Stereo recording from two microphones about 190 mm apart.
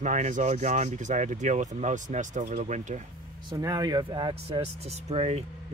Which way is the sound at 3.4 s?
20° right (ahead or behind).